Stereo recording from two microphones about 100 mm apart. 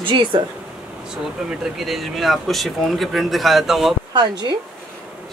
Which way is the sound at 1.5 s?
Centre (ahead or behind).